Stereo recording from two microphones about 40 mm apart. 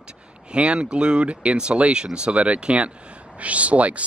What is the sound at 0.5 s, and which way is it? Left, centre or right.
Speech, right.